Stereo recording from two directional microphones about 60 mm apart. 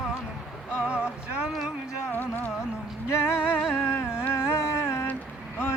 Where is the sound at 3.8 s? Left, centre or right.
Left.